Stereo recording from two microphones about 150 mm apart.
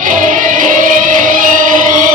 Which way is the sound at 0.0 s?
60° right (ahead or behind).